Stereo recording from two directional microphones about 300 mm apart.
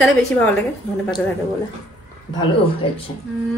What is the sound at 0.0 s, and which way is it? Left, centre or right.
A woman's voice, centre.